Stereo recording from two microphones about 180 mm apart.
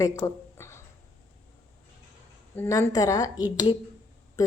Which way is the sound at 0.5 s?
15° left (ahead or behind).